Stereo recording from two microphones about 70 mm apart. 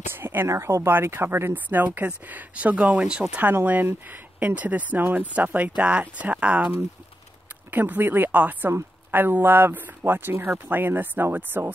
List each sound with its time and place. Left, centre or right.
0.1 s a sound: right
0.5 s speech: right; by 3.3 s centre
3.3 s speech: right
7.7 s speech: right